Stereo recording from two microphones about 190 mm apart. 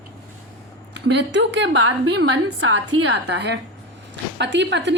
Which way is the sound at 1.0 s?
65° right (ahead or behind).